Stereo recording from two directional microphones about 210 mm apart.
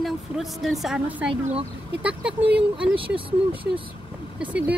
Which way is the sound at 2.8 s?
25° right (ahead or behind).